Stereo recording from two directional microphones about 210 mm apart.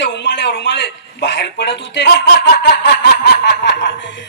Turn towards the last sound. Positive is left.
turn(degrees=60)  # may be behind; listen again after turning